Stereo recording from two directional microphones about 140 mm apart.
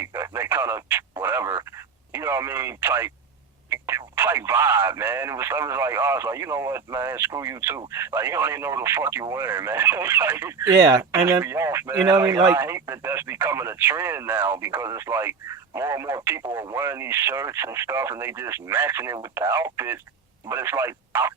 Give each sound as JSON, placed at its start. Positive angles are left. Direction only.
{"t": 0.0, "sound": "radio", "side_deg": -20}
{"t": 1.2, "sound": "speech", "side_deg": -20}